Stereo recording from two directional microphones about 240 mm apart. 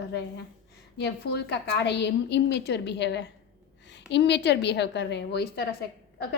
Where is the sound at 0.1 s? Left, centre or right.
Left.